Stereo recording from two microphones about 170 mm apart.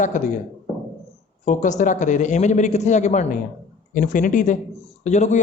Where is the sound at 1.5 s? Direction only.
45° left (ahead or behind).